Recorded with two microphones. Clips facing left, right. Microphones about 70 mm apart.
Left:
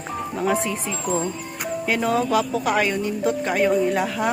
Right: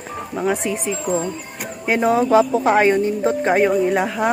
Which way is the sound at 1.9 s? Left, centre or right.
Right.